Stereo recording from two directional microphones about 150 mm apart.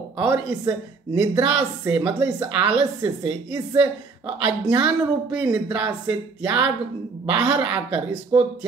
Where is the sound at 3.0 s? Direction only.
25° right (ahead or behind).